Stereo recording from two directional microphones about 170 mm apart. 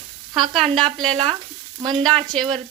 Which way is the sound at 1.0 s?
30° right (ahead or behind).